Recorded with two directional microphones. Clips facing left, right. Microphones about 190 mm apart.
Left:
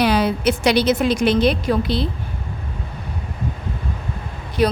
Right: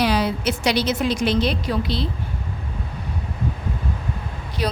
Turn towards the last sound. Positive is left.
turn(degrees=55)  # may be behind; listen again after turning